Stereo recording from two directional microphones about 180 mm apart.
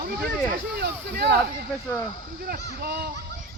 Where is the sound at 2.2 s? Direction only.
55° right (ahead or behind).